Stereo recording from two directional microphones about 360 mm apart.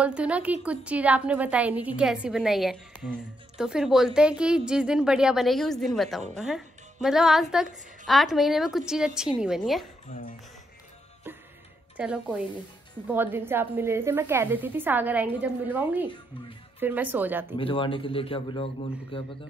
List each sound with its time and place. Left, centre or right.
0.0 s a woman's voice: centre
10.0 s a sound: left
11.3 s music: centre
12.0 s a woman's voice: centre
17.6 s a man's voice: centre